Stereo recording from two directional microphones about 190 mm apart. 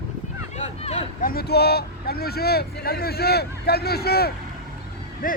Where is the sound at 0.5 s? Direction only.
35° left (ahead or behind).